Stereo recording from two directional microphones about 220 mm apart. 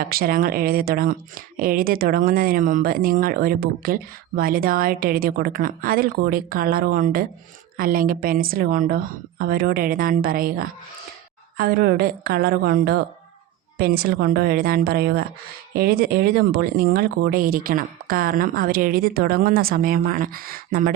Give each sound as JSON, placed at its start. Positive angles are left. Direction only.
{"t": 0.1, "sound": "a woman's voice", "side_deg": -40}